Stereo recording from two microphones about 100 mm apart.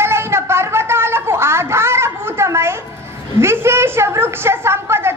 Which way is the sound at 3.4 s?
25° right (ahead or behind).